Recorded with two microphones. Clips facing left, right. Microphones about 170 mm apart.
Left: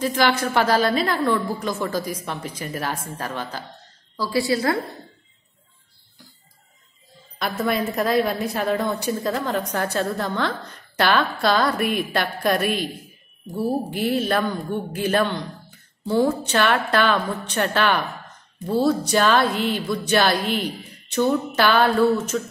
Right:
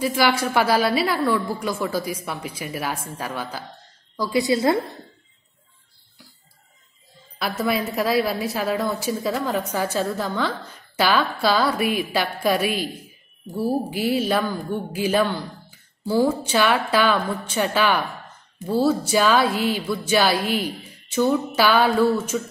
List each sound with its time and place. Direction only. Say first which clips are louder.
0.0 s a woman's voice: even; 10° right (ahead or behind)
7.3 s a woman's voice: even; 5° right (ahead or behind)